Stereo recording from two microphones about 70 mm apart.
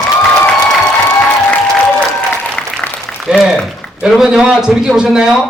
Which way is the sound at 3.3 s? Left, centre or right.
Centre.